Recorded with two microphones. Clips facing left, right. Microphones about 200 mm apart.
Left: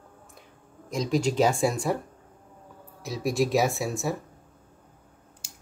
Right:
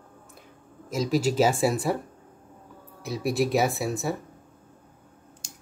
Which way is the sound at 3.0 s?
Centre (ahead or behind).